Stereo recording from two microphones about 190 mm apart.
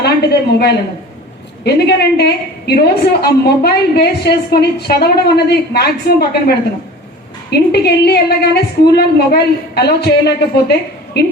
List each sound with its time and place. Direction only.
0.0 s a woman's voice: 60° left (ahead or behind)
7.7 s a woman's voice: 60° left (ahead or behind)